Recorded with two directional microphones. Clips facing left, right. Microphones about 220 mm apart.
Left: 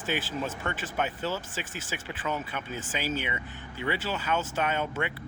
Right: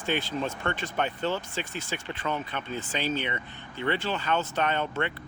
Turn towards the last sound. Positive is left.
turn(degrees=5)  # may be behind; listen again after turning